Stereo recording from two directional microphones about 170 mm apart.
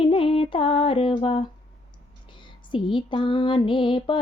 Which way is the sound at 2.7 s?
30° left (ahead or behind).